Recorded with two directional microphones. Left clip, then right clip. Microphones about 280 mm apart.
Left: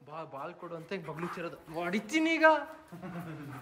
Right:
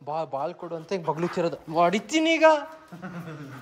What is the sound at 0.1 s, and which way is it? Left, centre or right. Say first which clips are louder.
A man's voice: right 12 dB; centre.